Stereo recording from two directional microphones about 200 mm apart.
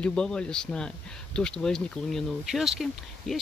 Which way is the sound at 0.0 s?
5° left (ahead or behind).